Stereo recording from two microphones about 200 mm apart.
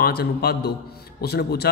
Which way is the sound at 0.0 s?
50° left (ahead or behind).